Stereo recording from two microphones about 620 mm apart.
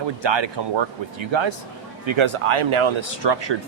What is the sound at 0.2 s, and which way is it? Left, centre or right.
Speech, right.